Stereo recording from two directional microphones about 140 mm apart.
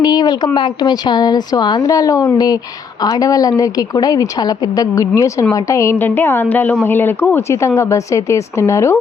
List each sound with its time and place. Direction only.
0.0 s a woman's voice: 30° left (ahead or behind)